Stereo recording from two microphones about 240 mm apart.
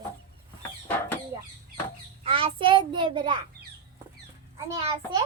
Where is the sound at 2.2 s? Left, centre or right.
Right.